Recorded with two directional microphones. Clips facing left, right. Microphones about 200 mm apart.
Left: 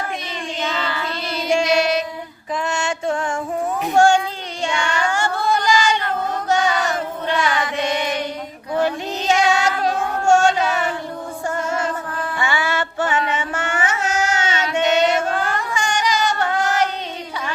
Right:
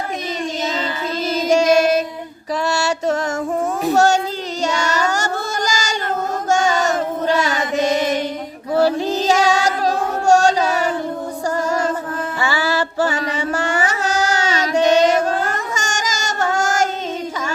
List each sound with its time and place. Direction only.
1.3 s child singing: 40° right (ahead or behind)
12.4 s music: 35° right (ahead or behind)